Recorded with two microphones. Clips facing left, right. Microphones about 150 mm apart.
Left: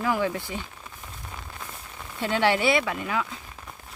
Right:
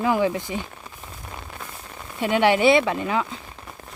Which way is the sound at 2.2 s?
15° right (ahead or behind).